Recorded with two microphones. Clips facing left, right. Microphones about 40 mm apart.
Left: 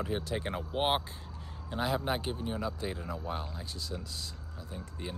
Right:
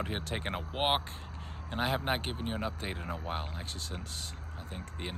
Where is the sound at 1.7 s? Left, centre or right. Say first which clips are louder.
Even; right.